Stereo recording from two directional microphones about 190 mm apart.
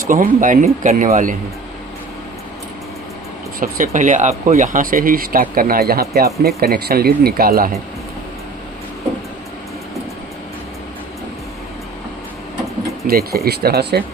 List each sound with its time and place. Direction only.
0.1 s speech: 45° right (ahead or behind)
3.6 s speech: 45° right (ahead or behind)
13.1 s speech: 55° right (ahead or behind)